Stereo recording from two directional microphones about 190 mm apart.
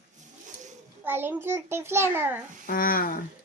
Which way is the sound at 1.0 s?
10° right (ahead or behind).